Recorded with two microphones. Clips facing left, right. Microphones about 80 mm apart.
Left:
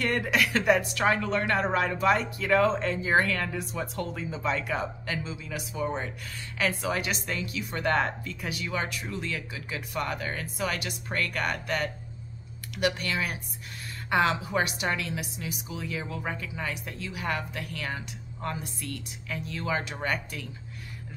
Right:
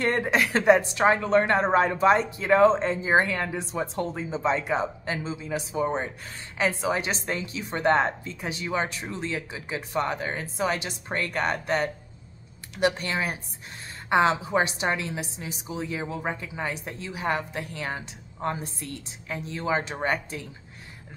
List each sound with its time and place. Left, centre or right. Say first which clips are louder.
0.0 s a woman's voice: right 3 dB; right